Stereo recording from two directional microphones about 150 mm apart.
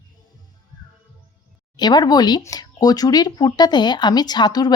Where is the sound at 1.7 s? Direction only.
30° left (ahead or behind).